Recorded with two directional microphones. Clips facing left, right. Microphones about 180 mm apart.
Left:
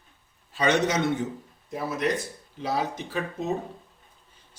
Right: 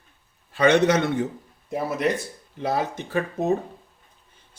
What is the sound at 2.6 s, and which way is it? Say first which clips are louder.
Speech: right 3 dB; 55° right (ahead or behind).